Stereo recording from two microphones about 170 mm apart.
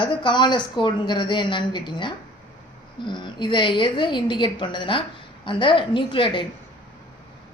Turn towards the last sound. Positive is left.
turn(degrees=30)  # may be behind; listen again after turning